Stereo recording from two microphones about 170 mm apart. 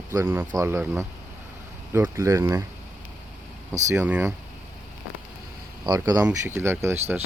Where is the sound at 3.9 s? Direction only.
10° right (ahead or behind).